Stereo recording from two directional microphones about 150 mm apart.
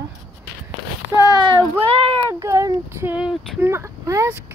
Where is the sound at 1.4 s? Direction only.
30° right (ahead or behind).